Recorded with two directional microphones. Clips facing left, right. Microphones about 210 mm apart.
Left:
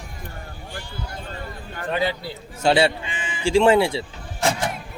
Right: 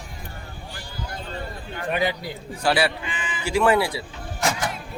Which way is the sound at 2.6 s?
25° left (ahead or behind).